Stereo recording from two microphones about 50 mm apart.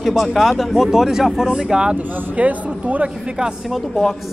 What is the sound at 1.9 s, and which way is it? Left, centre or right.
Speech, right.